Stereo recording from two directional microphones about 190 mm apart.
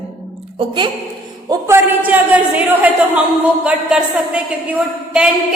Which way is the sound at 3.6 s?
5° right (ahead or behind).